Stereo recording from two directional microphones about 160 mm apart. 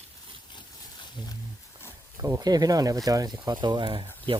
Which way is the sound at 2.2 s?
20° right (ahead or behind).